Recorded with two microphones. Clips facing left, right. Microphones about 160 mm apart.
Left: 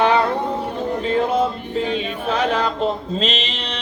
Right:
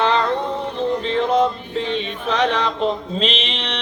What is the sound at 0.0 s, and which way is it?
Music, 10° left (ahead or behind).